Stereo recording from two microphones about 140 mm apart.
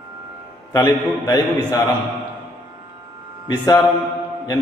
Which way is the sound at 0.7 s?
25° left (ahead or behind).